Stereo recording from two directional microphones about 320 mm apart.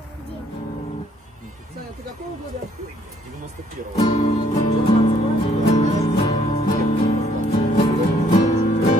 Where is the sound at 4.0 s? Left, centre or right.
Centre.